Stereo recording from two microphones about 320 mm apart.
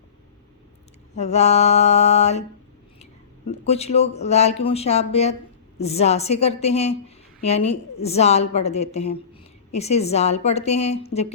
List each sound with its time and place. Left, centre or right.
1.1 s a woman's voice: centre
3.7 s a woman's voice: centre